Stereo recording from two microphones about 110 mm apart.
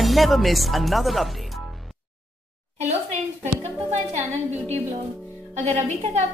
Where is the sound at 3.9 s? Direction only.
90° right.